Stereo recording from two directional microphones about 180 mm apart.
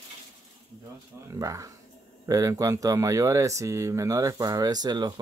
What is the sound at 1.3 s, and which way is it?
Speech, 15° right (ahead or behind).